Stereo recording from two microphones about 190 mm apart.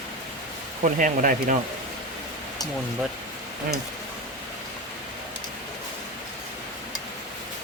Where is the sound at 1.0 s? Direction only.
45° right (ahead or behind).